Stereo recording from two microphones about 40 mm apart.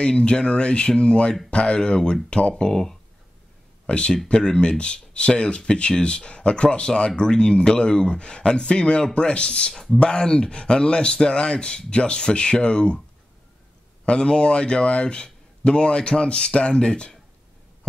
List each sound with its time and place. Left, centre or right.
0.0 s speech: left
14.0 s speech: left